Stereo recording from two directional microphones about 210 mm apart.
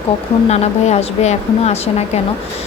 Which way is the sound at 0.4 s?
30° left (ahead or behind).